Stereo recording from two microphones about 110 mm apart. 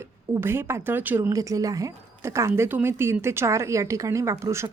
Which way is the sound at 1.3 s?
30° right (ahead or behind).